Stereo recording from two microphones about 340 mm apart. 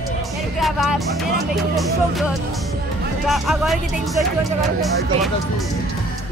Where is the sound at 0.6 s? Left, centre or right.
Centre.